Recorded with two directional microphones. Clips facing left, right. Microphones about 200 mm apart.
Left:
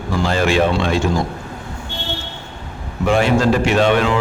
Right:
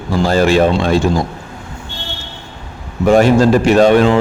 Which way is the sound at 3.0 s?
40° right (ahead or behind).